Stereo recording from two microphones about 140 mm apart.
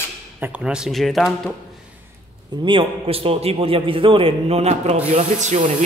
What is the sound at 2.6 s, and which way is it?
A man's voice, 40° right (ahead or behind).